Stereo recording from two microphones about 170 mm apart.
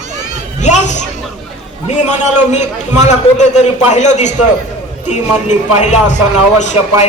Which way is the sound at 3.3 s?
45° left (ahead or behind).